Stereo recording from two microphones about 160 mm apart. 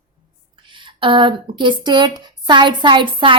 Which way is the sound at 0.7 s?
30° right (ahead or behind).